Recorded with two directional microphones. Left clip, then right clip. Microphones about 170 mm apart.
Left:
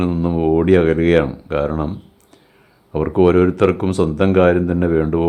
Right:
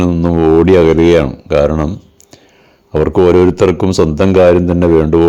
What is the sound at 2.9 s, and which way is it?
Speech, 30° right (ahead or behind).